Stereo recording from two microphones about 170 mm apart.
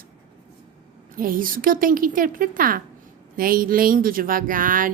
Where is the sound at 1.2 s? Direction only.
55° right (ahead or behind).